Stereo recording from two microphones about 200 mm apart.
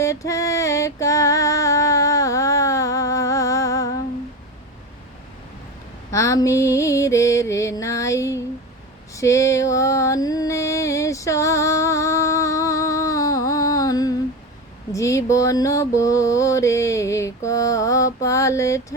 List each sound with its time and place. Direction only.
0.0 s music: 15° left (ahead or behind)
6.1 s mantra: 15° left (ahead or behind)
9.1 s music: 15° left (ahead or behind)
14.9 s mantra: 15° left (ahead or behind)